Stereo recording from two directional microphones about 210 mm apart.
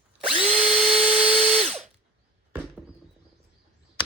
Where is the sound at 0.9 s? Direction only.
30° right (ahead or behind).